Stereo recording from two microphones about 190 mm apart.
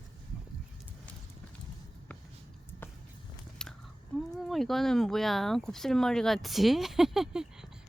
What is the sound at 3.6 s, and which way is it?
Chewing, 5° left (ahead or behind).